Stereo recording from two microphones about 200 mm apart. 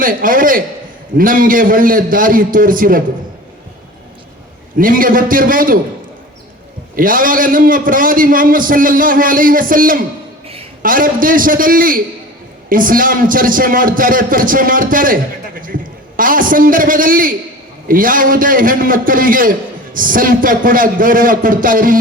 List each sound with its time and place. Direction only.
0.0 s a man's voice: 45° right (ahead or behind)
4.8 s a man's voice: 45° right (ahead or behind)
6.9 s a man's voice: 45° right (ahead or behind)